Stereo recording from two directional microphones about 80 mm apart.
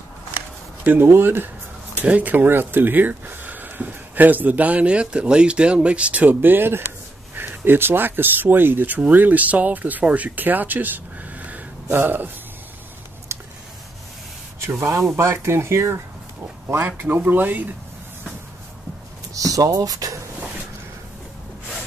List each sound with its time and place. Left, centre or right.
1.0 s speech: right
13.3 s a sound: right
14.7 s speech: right
19.3 s speech: right